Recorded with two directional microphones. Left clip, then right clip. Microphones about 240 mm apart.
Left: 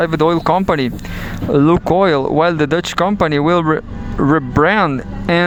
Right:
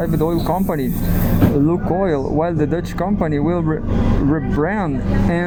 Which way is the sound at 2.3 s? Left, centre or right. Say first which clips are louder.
Left 5 dB; left.